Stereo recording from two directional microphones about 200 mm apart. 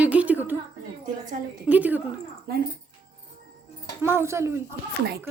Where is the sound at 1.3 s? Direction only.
40° right (ahead or behind).